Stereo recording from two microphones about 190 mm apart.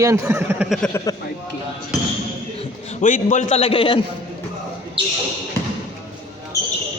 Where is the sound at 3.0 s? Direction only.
40° left (ahead or behind).